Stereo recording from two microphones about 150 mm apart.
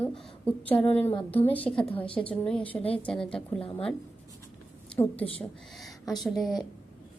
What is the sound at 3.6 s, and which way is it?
Speech, 40° left (ahead or behind).